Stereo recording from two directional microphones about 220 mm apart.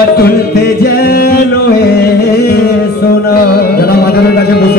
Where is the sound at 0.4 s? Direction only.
45° left (ahead or behind).